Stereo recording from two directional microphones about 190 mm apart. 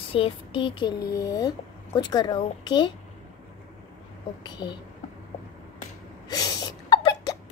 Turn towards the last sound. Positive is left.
turn(degrees=25)  # may be behind; listen again after turning